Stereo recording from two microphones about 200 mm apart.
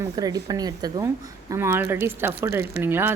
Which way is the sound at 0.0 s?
20° right (ahead or behind).